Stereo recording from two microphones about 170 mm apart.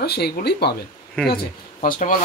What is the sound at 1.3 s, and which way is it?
Speech, 55° left (ahead or behind).